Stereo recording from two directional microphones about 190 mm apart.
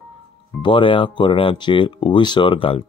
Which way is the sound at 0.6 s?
25° left (ahead or behind).